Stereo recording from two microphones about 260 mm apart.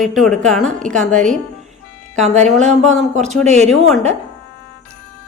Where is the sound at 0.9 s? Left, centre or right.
Right.